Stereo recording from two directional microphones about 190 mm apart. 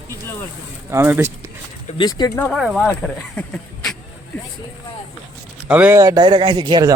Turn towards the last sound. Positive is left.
turn(degrees=-20)  # may be behind; listen again after turning